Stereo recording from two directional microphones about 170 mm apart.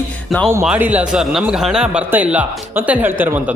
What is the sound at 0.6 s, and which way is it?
A man's voice, 10° right (ahead or behind).